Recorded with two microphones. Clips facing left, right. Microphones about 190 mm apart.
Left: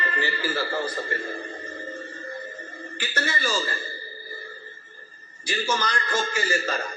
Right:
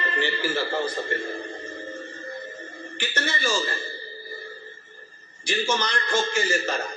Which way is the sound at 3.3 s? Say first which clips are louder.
Right 2 dB; 25° right (ahead or behind).